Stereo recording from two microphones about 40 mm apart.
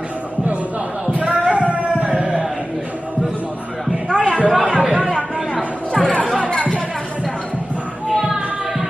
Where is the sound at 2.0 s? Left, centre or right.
Right.